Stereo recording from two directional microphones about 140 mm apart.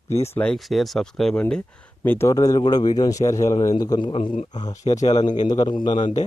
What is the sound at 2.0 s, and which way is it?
A man's voice, 15° left (ahead or behind).